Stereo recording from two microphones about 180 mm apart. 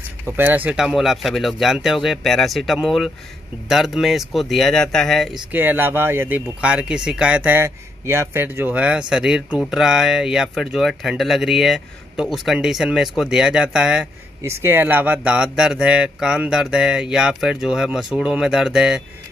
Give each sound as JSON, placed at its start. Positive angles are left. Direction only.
{"t": 0.2, "sound": "speech", "side_deg": -10}
{"t": 5.5, "sound": "speech", "side_deg": -10}